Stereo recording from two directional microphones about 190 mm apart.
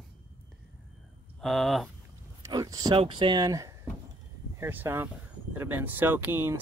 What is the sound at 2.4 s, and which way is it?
Speech, 20° right (ahead or behind).